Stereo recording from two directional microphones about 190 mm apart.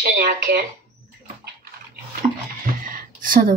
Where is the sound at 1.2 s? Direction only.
50° right (ahead or behind).